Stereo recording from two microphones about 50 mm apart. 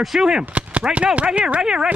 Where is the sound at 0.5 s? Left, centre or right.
Right.